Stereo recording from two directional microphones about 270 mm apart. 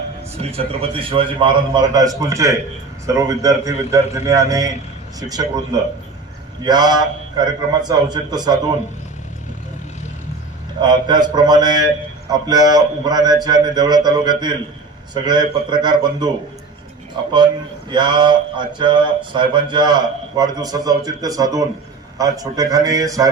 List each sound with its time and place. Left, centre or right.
0.3 s speech: right
6.6 s speech: centre
10.8 s speech: centre
17.3 s speech: centre